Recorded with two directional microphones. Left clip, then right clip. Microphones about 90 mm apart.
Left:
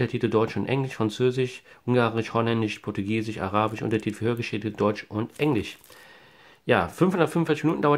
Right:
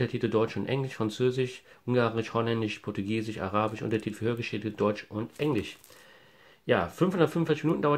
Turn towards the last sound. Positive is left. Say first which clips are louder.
# left 4 dB
turn(degrees=40)  # may be behind; listen again after turning